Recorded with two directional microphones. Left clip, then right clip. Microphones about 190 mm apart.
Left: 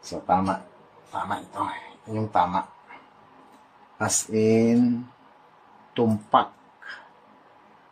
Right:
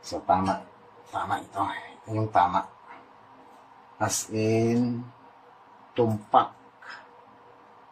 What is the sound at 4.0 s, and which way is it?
Speech, 60° left (ahead or behind).